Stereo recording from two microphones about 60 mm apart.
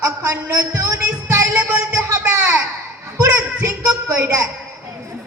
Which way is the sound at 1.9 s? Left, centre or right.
Right.